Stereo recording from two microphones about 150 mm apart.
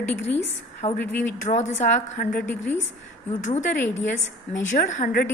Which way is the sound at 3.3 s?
50° left (ahead or behind).